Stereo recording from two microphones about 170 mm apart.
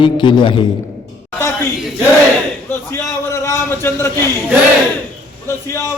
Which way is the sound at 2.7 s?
15° left (ahead or behind).